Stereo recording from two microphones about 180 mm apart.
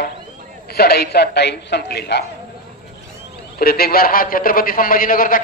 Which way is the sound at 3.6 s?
60° left (ahead or behind).